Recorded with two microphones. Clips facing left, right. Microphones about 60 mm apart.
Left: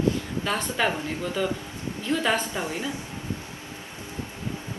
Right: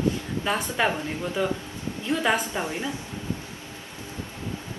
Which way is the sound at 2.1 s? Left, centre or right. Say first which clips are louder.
Right 1 dB; right.